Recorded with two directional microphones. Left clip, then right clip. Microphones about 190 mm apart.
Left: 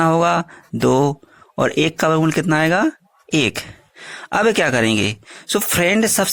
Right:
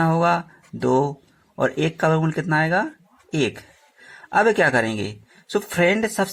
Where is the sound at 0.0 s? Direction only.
35° left (ahead or behind).